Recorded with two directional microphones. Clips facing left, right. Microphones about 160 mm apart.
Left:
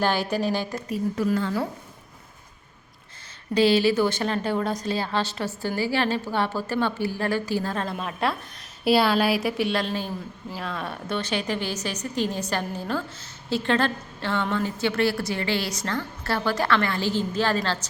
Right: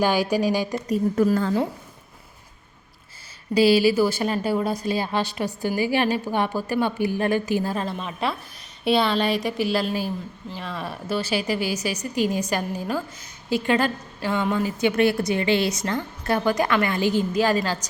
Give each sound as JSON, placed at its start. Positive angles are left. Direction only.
{"t": 0.0, "sound": "a woman's voice", "side_deg": -10}
{"t": 0.9, "sound": "a woman's voice", "side_deg": -45}
{"t": 3.5, "sound": "a woman's voice", "side_deg": -10}